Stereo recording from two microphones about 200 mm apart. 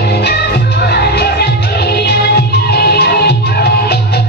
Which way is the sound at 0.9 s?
55° left (ahead or behind).